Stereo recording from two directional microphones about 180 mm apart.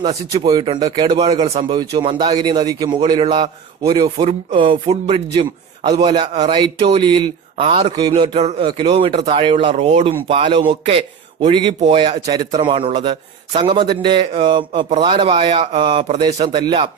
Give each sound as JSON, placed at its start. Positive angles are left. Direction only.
{"t": 0.0, "sound": "a man's voice", "side_deg": -25}